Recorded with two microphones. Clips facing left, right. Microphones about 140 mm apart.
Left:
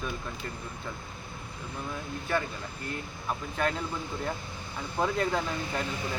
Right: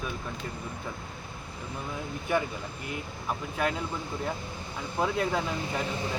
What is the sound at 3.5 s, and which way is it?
Speech, 5° right (ahead or behind).